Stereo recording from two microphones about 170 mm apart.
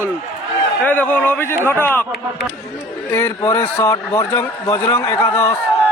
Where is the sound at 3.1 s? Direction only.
15° left (ahead or behind).